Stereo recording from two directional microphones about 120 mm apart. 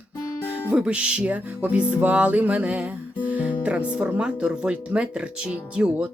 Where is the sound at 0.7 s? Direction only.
10° right (ahead or behind).